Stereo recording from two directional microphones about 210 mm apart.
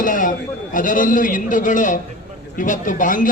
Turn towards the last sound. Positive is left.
turn(degrees=40)  # may be behind; listen again after turning